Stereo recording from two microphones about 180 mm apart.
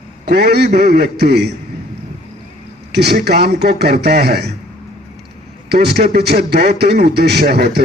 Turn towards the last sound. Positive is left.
turn(degrees=-60)  # may be behind; listen again after turning